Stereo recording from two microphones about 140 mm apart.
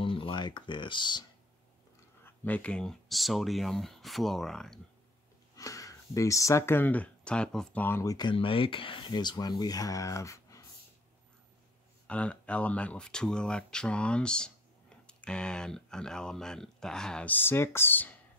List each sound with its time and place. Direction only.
0.0 s speech: 40° left (ahead or behind)
2.2 s speech: 10° left (ahead or behind)
5.6 s speech: 25° left (ahead or behind)
12.1 s speech: 10° left (ahead or behind)